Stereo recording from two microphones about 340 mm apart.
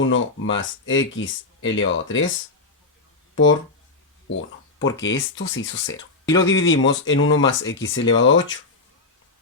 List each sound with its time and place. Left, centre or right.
0.0 s speech: left
4.3 s a sound: left
4.9 s speech: left
6.2 s speech: centre
6.5 s speech: left